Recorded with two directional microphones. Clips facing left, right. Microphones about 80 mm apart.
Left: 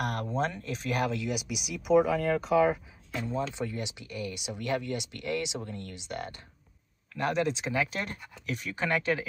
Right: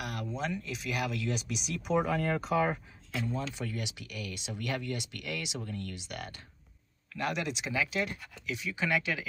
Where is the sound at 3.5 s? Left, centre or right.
Left.